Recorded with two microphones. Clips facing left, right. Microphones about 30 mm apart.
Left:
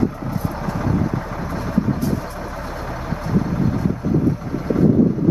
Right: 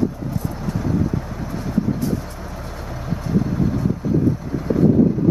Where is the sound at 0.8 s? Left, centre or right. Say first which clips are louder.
Even; left.